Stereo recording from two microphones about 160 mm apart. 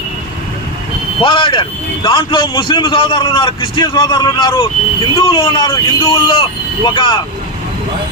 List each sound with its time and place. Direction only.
1.2 s a man's voice: 30° left (ahead or behind)